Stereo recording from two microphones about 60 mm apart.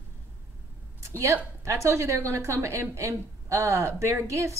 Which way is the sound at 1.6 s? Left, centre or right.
Right.